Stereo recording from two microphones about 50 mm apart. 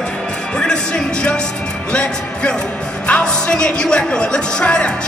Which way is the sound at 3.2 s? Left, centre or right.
Centre.